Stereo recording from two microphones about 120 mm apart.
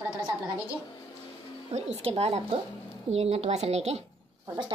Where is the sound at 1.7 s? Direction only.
60° right (ahead or behind).